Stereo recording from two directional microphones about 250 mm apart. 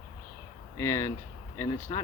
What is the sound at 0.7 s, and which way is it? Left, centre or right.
Speech, centre.